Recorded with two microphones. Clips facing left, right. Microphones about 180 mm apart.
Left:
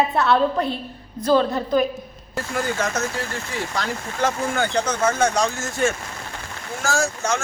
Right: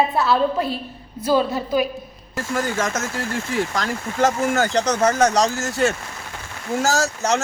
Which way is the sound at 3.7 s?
45° right (ahead or behind).